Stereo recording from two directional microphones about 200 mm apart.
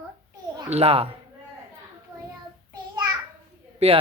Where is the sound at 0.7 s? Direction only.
30° right (ahead or behind).